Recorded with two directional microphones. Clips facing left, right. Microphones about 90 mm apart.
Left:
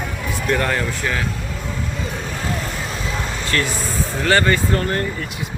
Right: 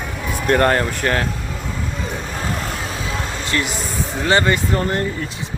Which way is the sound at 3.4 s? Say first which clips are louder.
Left 1 dB; 20° right (ahead or behind).